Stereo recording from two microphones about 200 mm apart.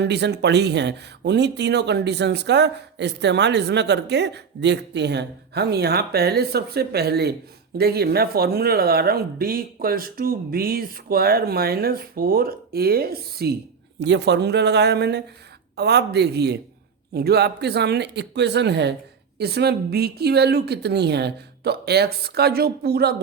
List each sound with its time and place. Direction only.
0.0 s speech: 55° right (ahead or behind)